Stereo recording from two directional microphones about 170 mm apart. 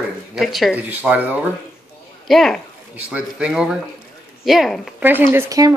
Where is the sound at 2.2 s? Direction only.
Centre (ahead or behind).